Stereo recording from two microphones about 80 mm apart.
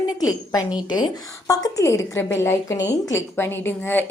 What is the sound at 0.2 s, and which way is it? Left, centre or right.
A woman's voice, left.